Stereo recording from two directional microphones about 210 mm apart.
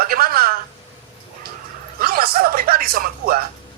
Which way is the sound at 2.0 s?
45° right (ahead or behind).